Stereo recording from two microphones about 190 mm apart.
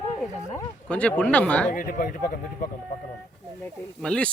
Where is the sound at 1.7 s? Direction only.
45° left (ahead or behind).